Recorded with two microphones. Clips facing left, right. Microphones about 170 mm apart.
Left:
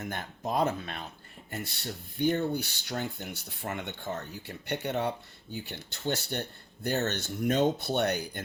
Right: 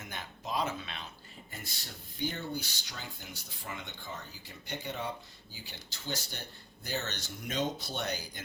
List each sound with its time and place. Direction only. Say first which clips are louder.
0.0 s speech: left 7 dB; 55° left (ahead or behind)
1.5 s speech: left 10 dB; 65° left (ahead or behind)